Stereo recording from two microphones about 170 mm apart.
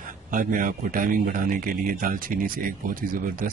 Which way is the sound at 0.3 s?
50° right (ahead or behind).